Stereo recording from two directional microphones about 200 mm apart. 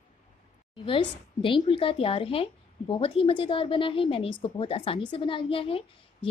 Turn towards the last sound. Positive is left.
turn(degrees=25)  # may be behind; listen again after turning